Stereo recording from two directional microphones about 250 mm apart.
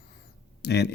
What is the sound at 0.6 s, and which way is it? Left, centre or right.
Speech, left.